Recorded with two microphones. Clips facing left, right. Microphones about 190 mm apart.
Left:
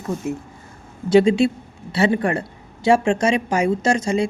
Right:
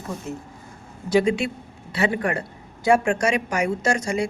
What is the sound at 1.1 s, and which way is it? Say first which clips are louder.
A woman's voice: left 6 dB; 30° left (ahead or behind).